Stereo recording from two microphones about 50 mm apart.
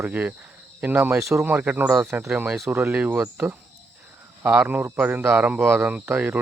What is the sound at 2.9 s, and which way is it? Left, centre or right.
Speech, right.